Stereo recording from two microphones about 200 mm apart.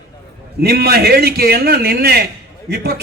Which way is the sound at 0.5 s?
55° right (ahead or behind).